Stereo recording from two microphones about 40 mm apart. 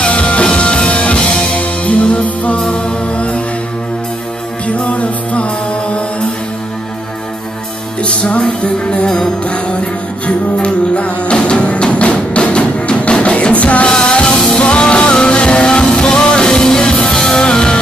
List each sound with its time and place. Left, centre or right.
0.0 s music: left
4.6 s music: left
8.0 s music: left
13.8 s music: left
14.6 s music: left